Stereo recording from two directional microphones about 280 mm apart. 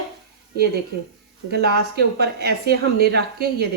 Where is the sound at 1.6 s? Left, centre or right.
Right.